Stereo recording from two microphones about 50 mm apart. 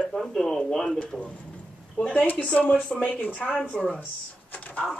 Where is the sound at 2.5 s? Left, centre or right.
Left.